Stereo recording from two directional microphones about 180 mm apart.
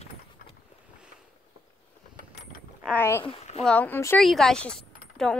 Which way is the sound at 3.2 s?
30° left (ahead or behind).